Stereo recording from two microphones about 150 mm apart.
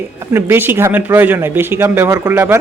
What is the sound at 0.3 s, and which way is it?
Speech, 15° right (ahead or behind).